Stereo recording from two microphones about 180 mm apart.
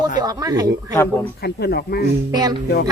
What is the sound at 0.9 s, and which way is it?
Speech, 15° left (ahead or behind).